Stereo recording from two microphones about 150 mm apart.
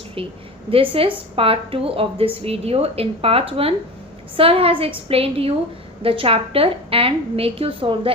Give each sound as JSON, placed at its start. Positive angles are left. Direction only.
{"t": 0.2, "sound": "a woman's voice", "side_deg": -40}